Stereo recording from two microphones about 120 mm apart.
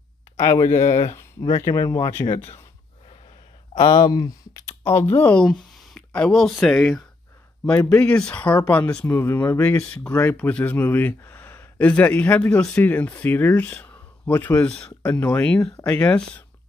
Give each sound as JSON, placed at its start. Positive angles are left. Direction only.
{"t": 0.4, "sound": "speech", "side_deg": 25}
{"t": 3.7, "sound": "speech", "side_deg": 40}